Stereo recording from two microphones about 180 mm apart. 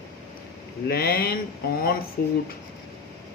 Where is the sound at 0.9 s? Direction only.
60° left (ahead or behind).